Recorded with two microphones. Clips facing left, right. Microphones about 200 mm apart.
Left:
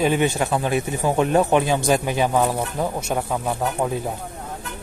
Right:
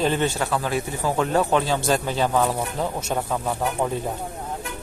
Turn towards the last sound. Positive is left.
turn(degrees=5)  # may be behind; listen again after turning